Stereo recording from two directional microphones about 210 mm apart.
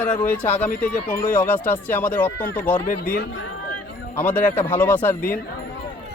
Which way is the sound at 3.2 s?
65° left (ahead or behind).